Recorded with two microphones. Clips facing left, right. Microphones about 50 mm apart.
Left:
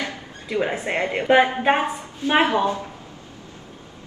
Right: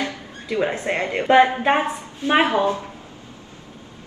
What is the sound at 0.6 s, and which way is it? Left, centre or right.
A woman's voice, centre.